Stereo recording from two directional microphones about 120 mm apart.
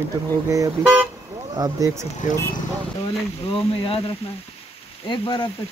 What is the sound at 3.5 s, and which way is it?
Speech, 50° left (ahead or behind).